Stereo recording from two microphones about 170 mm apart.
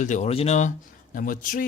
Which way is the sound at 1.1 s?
55° left (ahead or behind).